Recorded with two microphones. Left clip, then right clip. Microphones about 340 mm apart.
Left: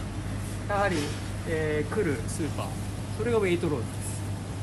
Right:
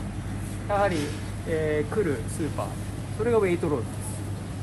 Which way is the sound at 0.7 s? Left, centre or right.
Centre.